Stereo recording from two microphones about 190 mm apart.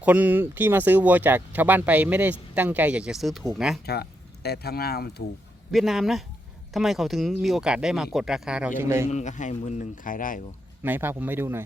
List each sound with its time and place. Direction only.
0.0 s speech: 10° right (ahead or behind)
4.4 s speech: 55° left (ahead or behind)
5.7 s speech: centre (ahead or behind)
9.0 s speech: 40° left (ahead or behind)
10.8 s speech: 10° right (ahead or behind)